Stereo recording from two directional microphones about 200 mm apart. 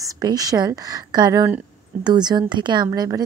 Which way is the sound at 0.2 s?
20° right (ahead or behind).